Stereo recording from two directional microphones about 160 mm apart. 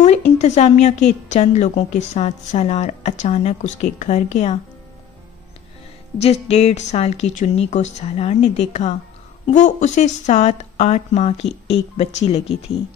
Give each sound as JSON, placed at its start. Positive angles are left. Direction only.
{"t": 0.0, "sound": "a woman's voice", "side_deg": 45}
{"t": 6.1, "sound": "a woman's voice", "side_deg": 40}